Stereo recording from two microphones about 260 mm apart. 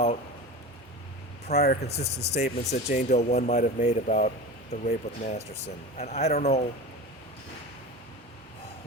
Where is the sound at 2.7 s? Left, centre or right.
Left.